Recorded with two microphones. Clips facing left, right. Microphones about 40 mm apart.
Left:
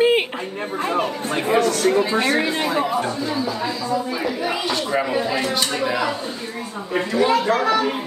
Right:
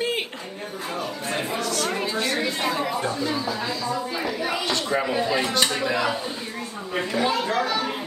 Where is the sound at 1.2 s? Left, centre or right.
Left.